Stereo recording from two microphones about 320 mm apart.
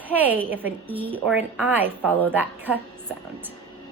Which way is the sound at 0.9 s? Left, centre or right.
Centre.